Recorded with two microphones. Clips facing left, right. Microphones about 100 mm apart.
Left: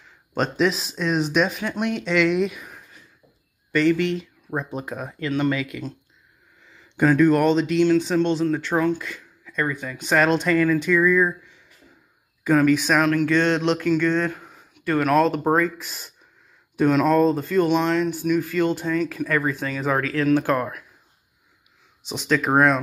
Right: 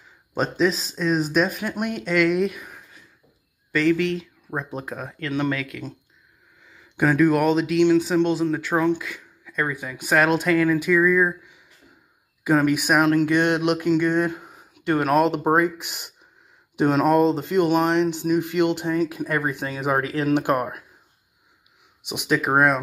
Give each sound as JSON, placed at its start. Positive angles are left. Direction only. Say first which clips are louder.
{"t": 0.3, "sound": "speech", "louder": "even", "side_deg": 0}
{"t": 13.0, "sound": "speech", "louder": "right 1 dB", "side_deg": -25}
{"t": 14.3, "sound": "a sound", "louder": "right 3 dB", "side_deg": -30}
{"t": 14.9, "sound": "speech", "louder": "even", "side_deg": -25}
{"t": 16.7, "sound": "speech", "louder": "left 1 dB", "side_deg": -35}
{"t": 17.1, "sound": "speech", "louder": "even", "side_deg": -20}
{"t": 22.1, "sound": "speech", "louder": "left 1 dB", "side_deg": -10}